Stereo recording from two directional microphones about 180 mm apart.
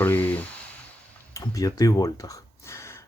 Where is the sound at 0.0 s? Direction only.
10° left (ahead or behind).